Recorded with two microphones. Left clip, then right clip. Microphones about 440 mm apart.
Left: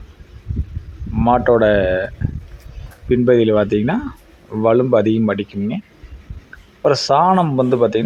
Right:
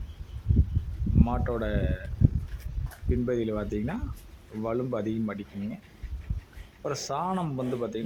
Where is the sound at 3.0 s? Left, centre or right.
Right.